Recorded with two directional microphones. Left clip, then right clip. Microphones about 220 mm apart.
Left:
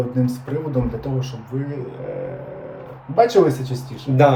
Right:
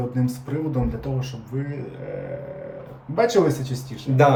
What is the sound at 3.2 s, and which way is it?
Speech, centre (ahead or behind).